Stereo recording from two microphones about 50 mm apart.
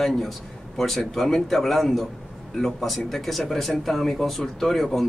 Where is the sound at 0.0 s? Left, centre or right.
Centre.